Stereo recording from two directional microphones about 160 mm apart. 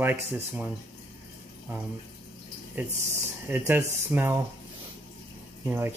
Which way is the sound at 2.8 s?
10° right (ahead or behind).